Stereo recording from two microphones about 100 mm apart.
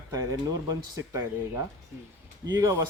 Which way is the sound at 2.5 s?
30° right (ahead or behind).